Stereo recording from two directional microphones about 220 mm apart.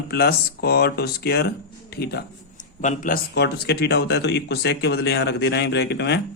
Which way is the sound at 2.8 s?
35° left (ahead or behind).